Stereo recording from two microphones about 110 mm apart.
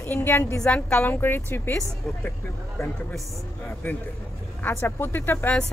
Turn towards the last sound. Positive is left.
turn(degrees=15)  # may be behind; listen again after turning